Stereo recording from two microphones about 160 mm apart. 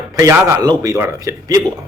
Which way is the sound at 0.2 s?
20° right (ahead or behind).